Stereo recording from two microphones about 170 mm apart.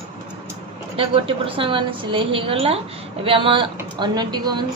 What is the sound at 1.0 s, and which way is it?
A woman's voice, 35° right (ahead or behind).